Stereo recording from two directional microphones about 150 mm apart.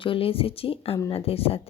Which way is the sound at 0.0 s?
35° left (ahead or behind).